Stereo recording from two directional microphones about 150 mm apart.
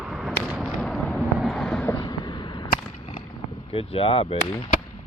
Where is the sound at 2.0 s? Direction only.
30° left (ahead or behind).